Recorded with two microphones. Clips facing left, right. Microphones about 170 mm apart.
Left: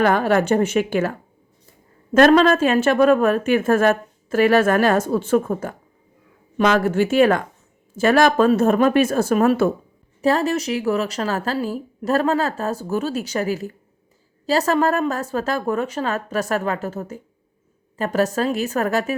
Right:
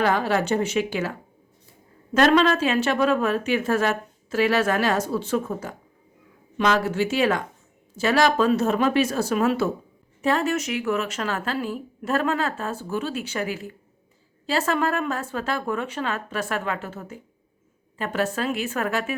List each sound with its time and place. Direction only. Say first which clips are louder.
0.0 s a woman's voice: left 5 dB; 50° left (ahead or behind)
2.1 s a woman's voice: left 5 dB; 50° left (ahead or behind)
10.2 s speech: left 4 dB; 35° left (ahead or behind)